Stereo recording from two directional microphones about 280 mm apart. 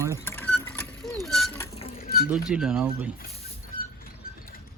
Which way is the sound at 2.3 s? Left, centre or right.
Centre.